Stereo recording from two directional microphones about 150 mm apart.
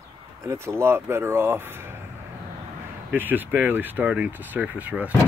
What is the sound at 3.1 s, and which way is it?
Speech, 10° right (ahead or behind).